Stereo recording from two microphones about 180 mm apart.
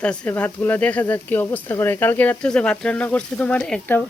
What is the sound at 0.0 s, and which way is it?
Speech, 10° left (ahead or behind).